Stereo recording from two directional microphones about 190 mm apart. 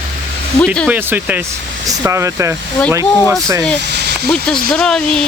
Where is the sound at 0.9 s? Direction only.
10° right (ahead or behind).